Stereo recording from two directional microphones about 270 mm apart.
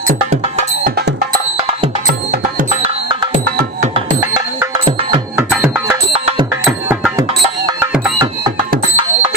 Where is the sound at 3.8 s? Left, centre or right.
Centre.